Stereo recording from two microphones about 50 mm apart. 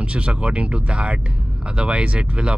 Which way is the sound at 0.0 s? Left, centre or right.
Right.